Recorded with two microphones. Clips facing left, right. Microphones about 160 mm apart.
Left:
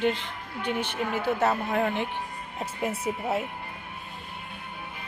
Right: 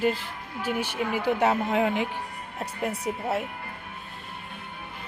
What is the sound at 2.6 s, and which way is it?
Speech, centre (ahead or behind).